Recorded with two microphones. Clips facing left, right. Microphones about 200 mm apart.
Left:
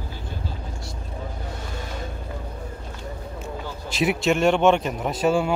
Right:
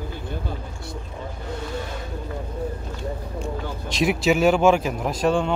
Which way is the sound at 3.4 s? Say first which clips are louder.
Right 2 dB; centre (ahead or behind).